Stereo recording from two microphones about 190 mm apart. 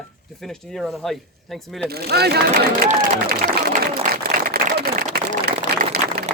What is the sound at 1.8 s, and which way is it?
Speech, 55° right (ahead or behind).